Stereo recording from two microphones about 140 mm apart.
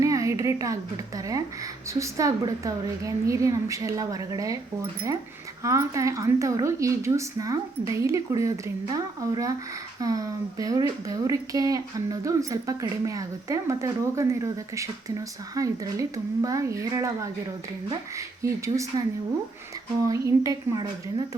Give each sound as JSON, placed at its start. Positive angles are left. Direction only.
{"t": 0.0, "sound": "a woman's voice", "side_deg": -20}
{"t": 5.6, "sound": "a woman's voice", "side_deg": -20}
{"t": 20.1, "sound": "a woman's voice", "side_deg": -20}